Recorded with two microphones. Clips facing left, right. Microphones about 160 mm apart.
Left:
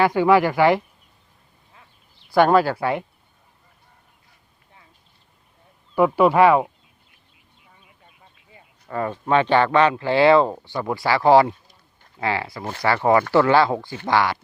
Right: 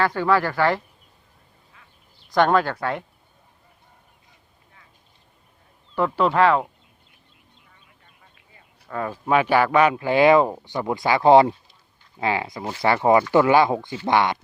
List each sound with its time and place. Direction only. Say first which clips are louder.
0.0 s speech: left 4 dB; 15° left (ahead or behind)
2.3 s speech: left 3 dB; 5° left (ahead or behind)
5.9 s speech: left 4 dB; 10° left (ahead or behind)
8.9 s speech: left 1 dB; centre (ahead or behind); by 14.3 s 20° right (ahead or behind)